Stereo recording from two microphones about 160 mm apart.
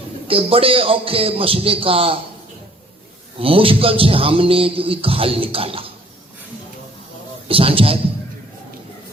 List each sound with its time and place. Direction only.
0.3 s speech: 35° right (ahead or behind)
3.3 s speech: 35° right (ahead or behind)
7.4 s speech: 35° right (ahead or behind)